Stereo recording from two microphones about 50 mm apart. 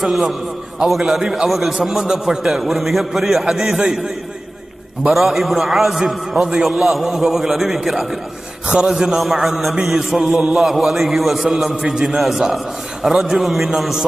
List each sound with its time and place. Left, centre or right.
0.0 s a man's voice: centre
5.1 s a man's voice: centre
6.7 s a man's voice: centre
8.6 s a man's voice: centre